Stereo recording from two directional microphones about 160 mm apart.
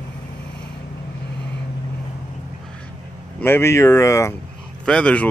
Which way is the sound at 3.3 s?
15° left (ahead or behind).